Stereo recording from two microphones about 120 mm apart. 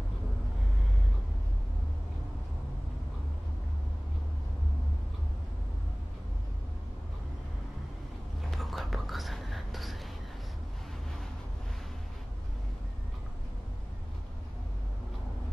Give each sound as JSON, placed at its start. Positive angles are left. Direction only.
{"t": 8.5, "sound": "whispering", "side_deg": 0}